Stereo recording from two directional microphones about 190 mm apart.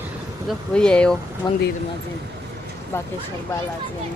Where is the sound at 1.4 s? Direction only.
20° left (ahead or behind).